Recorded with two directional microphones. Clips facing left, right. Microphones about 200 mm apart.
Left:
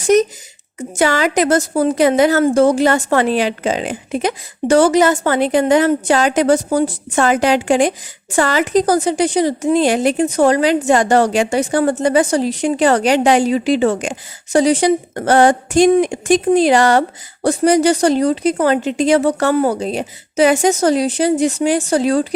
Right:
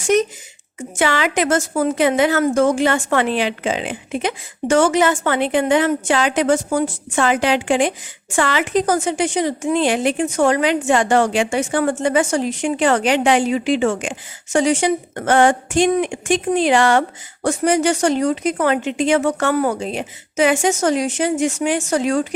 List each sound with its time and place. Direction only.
0.0 s a woman's voice: 40° left (ahead or behind)